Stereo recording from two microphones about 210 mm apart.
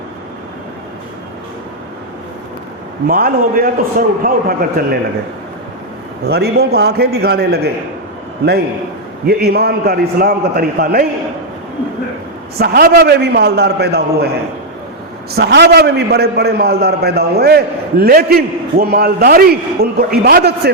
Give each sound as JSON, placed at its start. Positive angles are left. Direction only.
{"t": 3.1, "sound": "a man's voice", "side_deg": -45}
{"t": 6.2, "sound": "a man's voice", "side_deg": -50}
{"t": 9.2, "sound": "a man's voice", "side_deg": -50}
{"t": 12.5, "sound": "a man's voice", "side_deg": -50}
{"t": 15.4, "sound": "a man's voice", "side_deg": -50}